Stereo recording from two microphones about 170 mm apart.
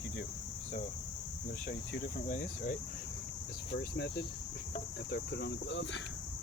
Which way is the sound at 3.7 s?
85° left.